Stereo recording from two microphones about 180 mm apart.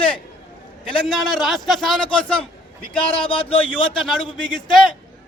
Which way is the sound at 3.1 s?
30° left (ahead or behind).